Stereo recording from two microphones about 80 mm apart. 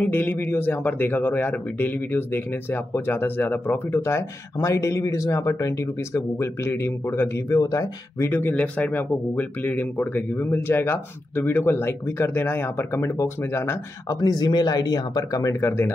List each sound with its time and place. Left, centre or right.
0.0 s a man's voice: left
8.3 s a man's voice: left
14.0 s speech: left